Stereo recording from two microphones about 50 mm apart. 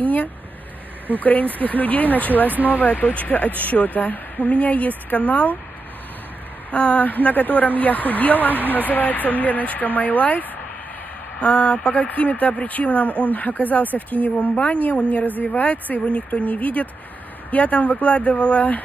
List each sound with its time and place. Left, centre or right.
0.0 s a sound: left
1.2 s a woman's voice: left
6.7 s a woman's voice: left
8.5 s speech: right
8.8 s a woman's voice: left